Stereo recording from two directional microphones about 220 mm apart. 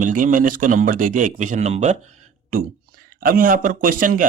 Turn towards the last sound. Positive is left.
turn(degrees=-40)  # may be behind; listen again after turning